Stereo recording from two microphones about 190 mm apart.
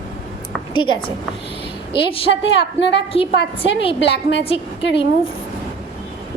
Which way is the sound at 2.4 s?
70° left (ahead or behind).